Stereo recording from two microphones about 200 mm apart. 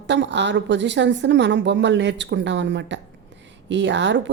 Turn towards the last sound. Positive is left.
turn(degrees=-65)  # may be behind; listen again after turning